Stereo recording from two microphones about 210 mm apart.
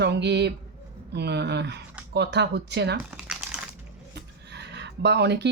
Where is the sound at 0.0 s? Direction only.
55° right (ahead or behind).